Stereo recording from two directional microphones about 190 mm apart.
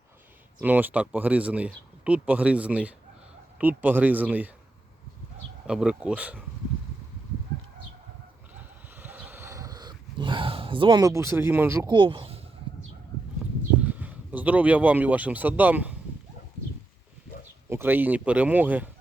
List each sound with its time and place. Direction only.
0.6 s speech: 10° right (ahead or behind)
5.6 s speech: 5° right (ahead or behind)
8.5 s dog: 10° right (ahead or behind)
11.9 s speech: 25° right (ahead or behind)
13.4 s a sound: 5° right (ahead or behind)
13.8 s speech: 10° right (ahead or behind)
17.7 s speech: 10° right (ahead or behind)